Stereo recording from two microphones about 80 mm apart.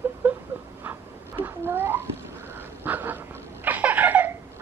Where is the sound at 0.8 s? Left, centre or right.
Right.